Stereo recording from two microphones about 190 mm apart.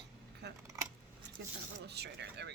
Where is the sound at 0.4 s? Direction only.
60° right (ahead or behind).